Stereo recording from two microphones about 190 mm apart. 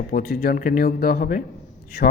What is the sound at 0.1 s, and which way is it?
Speech, 50° left (ahead or behind).